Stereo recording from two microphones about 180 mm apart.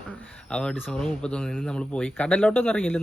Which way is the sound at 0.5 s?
5° left (ahead or behind).